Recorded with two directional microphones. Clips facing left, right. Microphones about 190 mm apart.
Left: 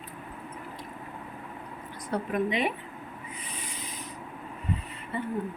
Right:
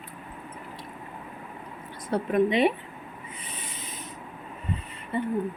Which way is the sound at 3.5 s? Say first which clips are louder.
Even; 25° right (ahead or behind).